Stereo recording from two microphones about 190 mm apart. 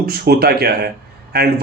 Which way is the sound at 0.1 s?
55° right (ahead or behind).